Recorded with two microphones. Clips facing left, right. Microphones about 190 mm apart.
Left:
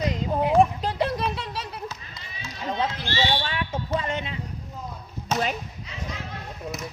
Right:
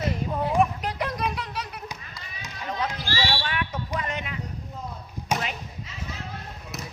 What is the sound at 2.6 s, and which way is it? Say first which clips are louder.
Basketball bounce: left 3 dB; 30° left (ahead or behind).